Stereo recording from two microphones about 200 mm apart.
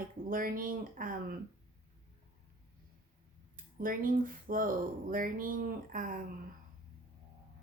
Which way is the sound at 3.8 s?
45° right (ahead or behind).